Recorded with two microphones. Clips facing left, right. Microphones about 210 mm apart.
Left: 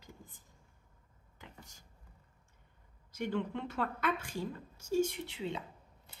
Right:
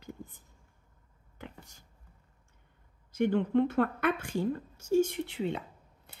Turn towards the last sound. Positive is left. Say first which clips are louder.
# right 1 dB
turn(degrees=-55)  # may be behind; listen again after turning